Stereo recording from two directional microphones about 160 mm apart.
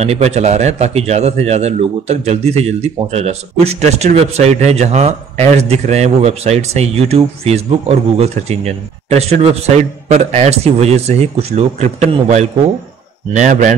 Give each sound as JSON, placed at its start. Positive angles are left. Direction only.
{"t": 0.0, "sound": "a man's voice", "side_deg": -40}